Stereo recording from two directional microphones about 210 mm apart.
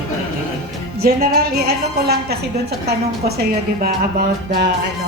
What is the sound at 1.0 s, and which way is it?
A woman's voice, 45° right (ahead or behind).